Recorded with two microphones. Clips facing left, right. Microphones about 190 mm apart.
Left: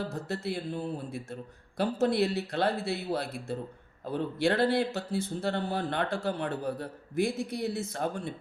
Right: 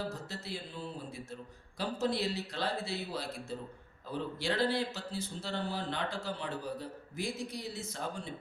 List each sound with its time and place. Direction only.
0.3 s speech: 60° left (ahead or behind)